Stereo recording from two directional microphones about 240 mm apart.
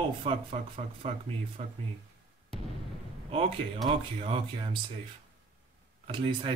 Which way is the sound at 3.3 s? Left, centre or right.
Right.